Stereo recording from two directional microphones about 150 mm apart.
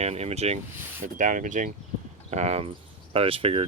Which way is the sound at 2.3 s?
45° right (ahead or behind).